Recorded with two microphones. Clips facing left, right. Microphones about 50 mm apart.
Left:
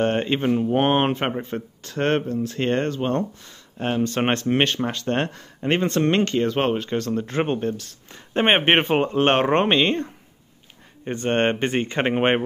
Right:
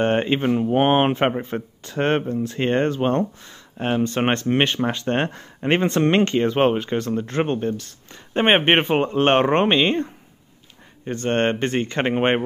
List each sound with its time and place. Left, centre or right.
0.0 s speech: centre
4.0 s speech: centre
7.2 s speech: centre
11.1 s speech: centre